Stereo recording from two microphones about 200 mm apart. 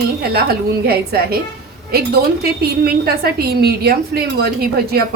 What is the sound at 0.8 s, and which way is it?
Speech, 50° right (ahead or behind).